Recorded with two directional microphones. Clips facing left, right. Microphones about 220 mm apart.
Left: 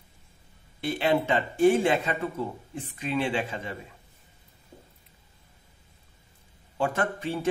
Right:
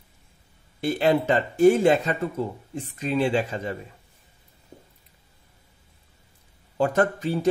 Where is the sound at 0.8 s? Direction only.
40° right (ahead or behind).